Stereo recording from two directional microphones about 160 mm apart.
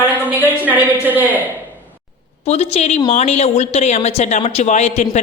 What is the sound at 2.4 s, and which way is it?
Speech, 40° left (ahead or behind).